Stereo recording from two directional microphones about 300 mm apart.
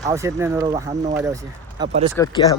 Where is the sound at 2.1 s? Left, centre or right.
Centre.